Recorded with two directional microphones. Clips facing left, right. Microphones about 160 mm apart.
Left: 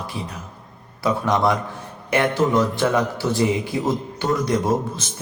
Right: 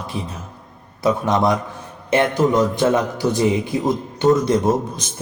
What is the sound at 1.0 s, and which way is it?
A man's voice, 20° right (ahead or behind).